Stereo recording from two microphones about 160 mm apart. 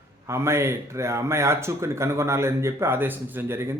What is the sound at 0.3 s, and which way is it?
Speech, 15° right (ahead or behind).